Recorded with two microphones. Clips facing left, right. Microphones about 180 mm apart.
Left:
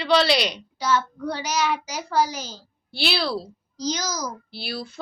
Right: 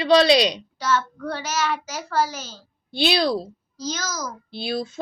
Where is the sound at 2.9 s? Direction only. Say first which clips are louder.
Right 5 dB; 20° right (ahead or behind).